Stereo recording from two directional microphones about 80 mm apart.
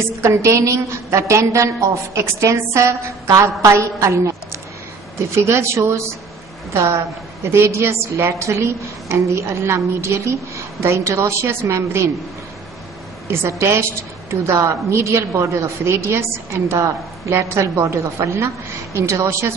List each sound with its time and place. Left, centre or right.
0.2 s a woman's voice: right
13.3 s a woman's voice: right